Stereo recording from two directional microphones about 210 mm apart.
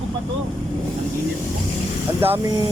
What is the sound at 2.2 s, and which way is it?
Speech, 25° right (ahead or behind).